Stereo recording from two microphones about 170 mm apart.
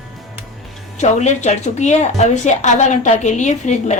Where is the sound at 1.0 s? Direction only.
45° left (ahead or behind).